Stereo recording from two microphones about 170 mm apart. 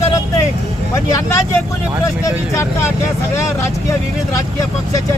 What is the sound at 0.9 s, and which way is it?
Speech, 20° left (ahead or behind).